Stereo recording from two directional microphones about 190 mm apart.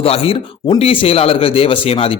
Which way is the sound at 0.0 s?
30° left (ahead or behind).